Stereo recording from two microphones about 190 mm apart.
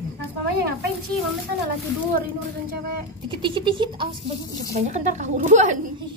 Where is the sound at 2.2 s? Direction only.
50° right (ahead or behind).